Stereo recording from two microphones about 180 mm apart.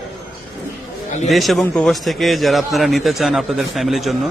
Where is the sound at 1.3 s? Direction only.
Centre (ahead or behind).